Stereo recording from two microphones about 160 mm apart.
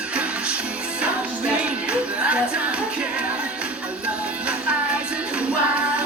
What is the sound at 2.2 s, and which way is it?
Music, 10° right (ahead or behind).